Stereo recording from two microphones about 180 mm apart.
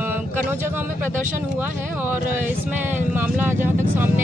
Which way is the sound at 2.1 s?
10° right (ahead or behind).